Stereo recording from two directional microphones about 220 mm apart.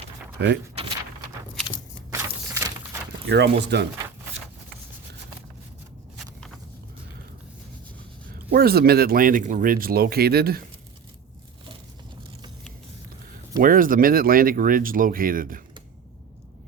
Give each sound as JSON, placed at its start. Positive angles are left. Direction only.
{"t": 0.3, "sound": "speech", "side_deg": -50}
{"t": 2.0, "sound": "a sound", "side_deg": -10}
{"t": 3.2, "sound": "speech", "side_deg": -50}
{"t": 8.4, "sound": "speech", "side_deg": -45}
{"t": 13.6, "sound": "speech", "side_deg": -40}